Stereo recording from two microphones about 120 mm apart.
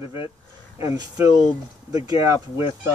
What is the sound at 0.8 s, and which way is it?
Speech, 25° right (ahead or behind).